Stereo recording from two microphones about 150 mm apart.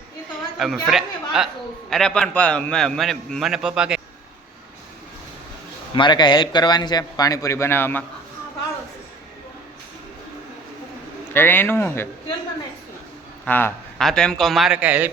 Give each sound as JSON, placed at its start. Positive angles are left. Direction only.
{"t": 0.6, "sound": "a man's voice", "side_deg": 0}
{"t": 5.9, "sound": "a man's voice", "side_deg": 30}
{"t": 11.3, "sound": "speech", "side_deg": 15}
{"t": 13.4, "sound": "a man's voice", "side_deg": 15}